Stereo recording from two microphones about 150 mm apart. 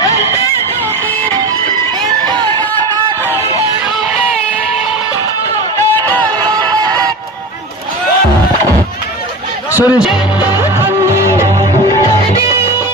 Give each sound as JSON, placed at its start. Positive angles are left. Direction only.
{"t": 2.0, "sound": "music", "side_deg": -25}
{"t": 6.4, "sound": "music", "side_deg": -30}
{"t": 9.7, "sound": "speech", "side_deg": -10}
{"t": 10.8, "sound": "music", "side_deg": -20}